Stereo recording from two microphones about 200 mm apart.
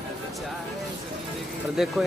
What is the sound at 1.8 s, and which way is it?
Speech, centre (ahead or behind).